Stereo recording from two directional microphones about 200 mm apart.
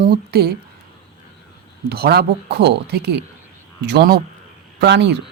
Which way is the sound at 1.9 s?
50° right (ahead or behind).